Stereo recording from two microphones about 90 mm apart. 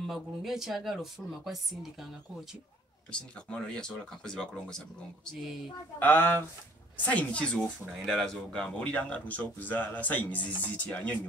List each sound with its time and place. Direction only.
0.1 s speech: 5° right (ahead or behind)
3.1 s speech: 10° left (ahead or behind)
5.9 s speech: 20° left (ahead or behind)
7.2 s speech: 10° left (ahead or behind)